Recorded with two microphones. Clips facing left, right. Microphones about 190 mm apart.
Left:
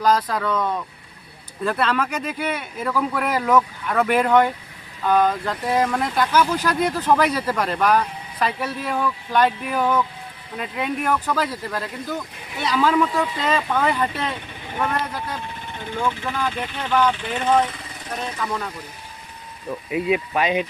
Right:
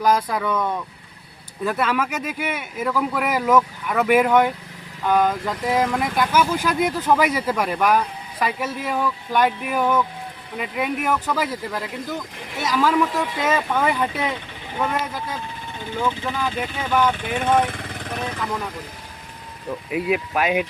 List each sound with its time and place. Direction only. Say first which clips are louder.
0.0 s speech: even; 10° right (ahead or behind)
14.8 s vehicle: even; 5° right (ahead or behind)
16.0 s speech: even; 5° right (ahead or behind)
19.9 s speech: left 1 dB; 5° right (ahead or behind)